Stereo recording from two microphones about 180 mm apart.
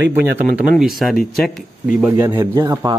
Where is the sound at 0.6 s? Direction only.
Centre (ahead or behind); by 2.9 s 20° right (ahead or behind).